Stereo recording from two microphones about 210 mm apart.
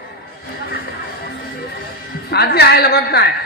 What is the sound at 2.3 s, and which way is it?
Speech, 50° left (ahead or behind).